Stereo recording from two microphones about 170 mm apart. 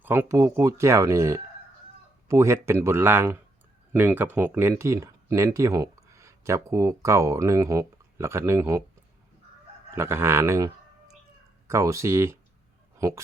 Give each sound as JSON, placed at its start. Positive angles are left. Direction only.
{"t": 0.0, "sound": "speech", "side_deg": -10}
{"t": 9.9, "sound": "speech", "side_deg": -15}
{"t": 11.7, "sound": "speech", "side_deg": -15}